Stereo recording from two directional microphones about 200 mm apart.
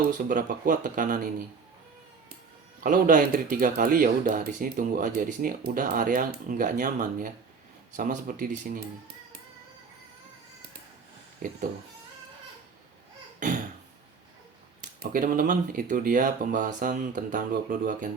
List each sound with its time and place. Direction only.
0.3 s speech: 45° right (ahead or behind)
2.8 s speech: 45° right (ahead or behind)
15.1 s speech: 45° right (ahead or behind)